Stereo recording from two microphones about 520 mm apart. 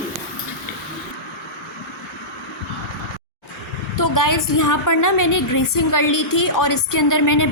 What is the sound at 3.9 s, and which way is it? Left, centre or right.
A woman's voice, left.